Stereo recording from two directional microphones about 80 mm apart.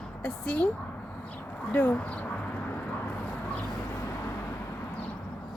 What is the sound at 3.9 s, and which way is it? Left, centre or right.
Vehicle, left.